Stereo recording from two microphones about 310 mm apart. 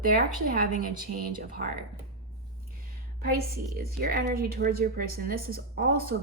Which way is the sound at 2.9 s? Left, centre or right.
Right.